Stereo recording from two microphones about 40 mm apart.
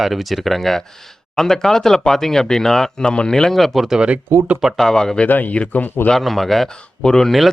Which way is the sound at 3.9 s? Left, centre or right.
Centre.